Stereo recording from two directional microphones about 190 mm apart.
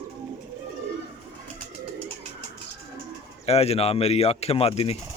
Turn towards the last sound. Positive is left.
turn(degrees=30)  # may be behind; listen again after turning